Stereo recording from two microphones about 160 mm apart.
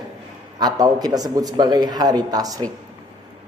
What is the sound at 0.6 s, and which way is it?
A man's voice, 25° right (ahead or behind).